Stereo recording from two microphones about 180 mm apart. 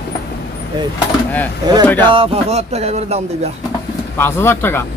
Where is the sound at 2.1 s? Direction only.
35° right (ahead or behind).